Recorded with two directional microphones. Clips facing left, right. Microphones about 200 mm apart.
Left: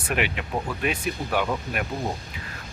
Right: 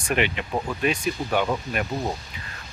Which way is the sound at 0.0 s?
5° left (ahead or behind).